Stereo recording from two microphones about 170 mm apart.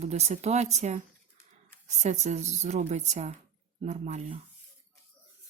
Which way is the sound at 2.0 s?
45° right (ahead or behind).